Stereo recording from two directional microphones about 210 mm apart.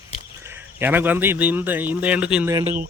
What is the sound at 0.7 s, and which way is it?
Speech, 10° right (ahead or behind).